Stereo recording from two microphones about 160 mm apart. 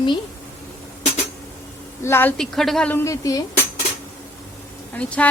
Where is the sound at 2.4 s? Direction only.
Centre (ahead or behind).